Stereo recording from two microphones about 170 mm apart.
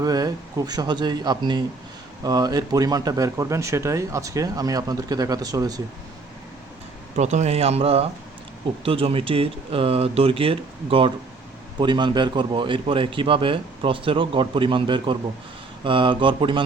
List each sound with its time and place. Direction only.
0.0 s speech: 20° right (ahead or behind)
7.2 s speech: 45° right (ahead or behind)